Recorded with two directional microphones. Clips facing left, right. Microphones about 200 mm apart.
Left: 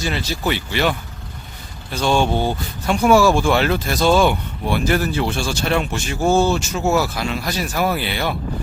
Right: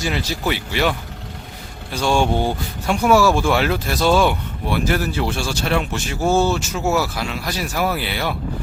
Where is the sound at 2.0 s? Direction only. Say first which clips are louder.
Even; 10° right (ahead or behind).